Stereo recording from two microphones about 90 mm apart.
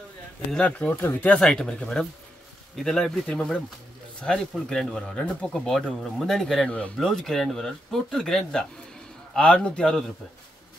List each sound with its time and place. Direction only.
0.5 s speech: 15° left (ahead or behind)
1.4 s speech: 5° left (ahead or behind)